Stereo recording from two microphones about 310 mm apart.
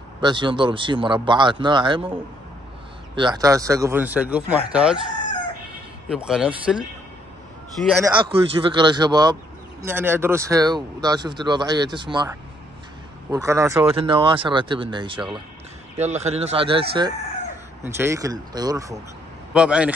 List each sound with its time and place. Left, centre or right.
0.2 s speech: centre
3.2 s speech: centre
6.0 s a man's voice: centre
8.0 s a man's voice: centre